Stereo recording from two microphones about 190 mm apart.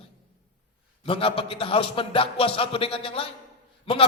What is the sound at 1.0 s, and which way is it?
A man's voice, 30° left (ahead or behind).